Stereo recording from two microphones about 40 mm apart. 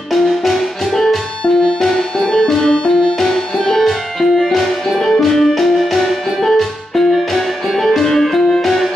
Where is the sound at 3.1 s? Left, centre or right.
Centre.